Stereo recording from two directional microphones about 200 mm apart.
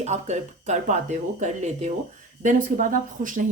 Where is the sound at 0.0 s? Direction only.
35° right (ahead or behind).